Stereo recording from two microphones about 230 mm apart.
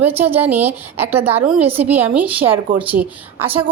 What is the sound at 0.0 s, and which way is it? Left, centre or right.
A woman's voice, centre.